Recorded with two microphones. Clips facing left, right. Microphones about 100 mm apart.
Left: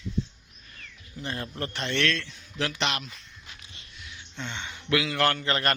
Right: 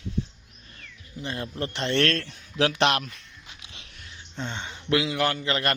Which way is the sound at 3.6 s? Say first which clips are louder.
Right 3 dB; 90° right.